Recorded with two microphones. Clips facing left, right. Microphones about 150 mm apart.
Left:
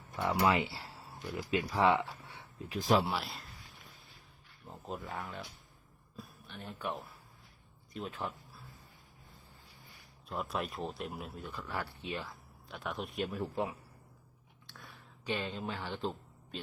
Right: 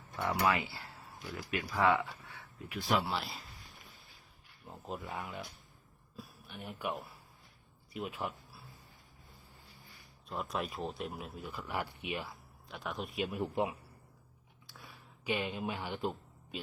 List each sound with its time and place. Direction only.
0.2 s speech: 20° left (ahead or behind)
2.7 s speech: 40° left (ahead or behind)
3.1 s speech: centre (ahead or behind)
4.7 s speech: 5° right (ahead or behind)
10.2 s speech: centre (ahead or behind)
11.6 s speech: 15° right (ahead or behind)
12.3 s speech: centre (ahead or behind)
13.3 s speech: 15° right (ahead or behind)
14.7 s a sound: 5° right (ahead or behind)